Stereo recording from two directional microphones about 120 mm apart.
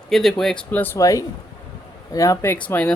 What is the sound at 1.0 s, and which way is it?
Speech, 25° left (ahead or behind).